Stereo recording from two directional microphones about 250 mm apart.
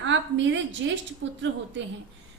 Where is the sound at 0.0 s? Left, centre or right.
Right.